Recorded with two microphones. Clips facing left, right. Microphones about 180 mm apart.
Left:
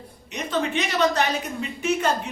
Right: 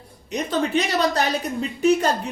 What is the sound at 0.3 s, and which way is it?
A woman's voice, 35° right (ahead or behind).